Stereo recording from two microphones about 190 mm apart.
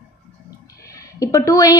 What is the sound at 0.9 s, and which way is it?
Speech, 15° left (ahead or behind).